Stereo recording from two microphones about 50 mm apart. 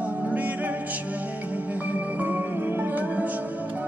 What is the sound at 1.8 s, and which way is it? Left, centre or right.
Music, right.